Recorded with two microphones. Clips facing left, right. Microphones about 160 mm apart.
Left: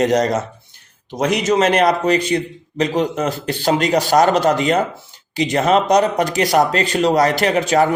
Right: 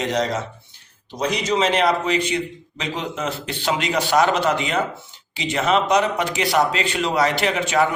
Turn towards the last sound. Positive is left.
turn(degrees=40)  # may be behind; listen again after turning